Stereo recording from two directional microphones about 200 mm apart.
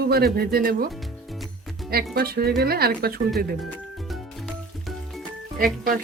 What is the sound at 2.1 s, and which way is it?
Speech, 50° right (ahead or behind).